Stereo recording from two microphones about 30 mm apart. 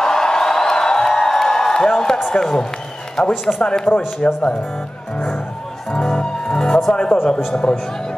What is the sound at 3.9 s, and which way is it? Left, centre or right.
Speech, left.